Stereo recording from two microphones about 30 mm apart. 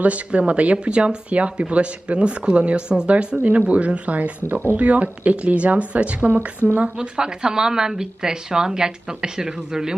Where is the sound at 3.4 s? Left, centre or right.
Right.